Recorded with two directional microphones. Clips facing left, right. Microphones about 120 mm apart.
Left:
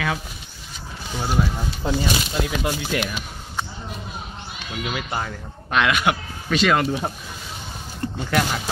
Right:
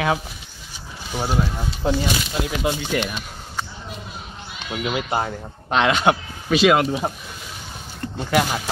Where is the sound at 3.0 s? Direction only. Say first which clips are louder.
Even; 5° left (ahead or behind).